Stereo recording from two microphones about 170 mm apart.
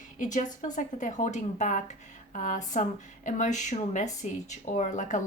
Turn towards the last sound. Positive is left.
turn(degrees=45)  # may be behind; listen again after turning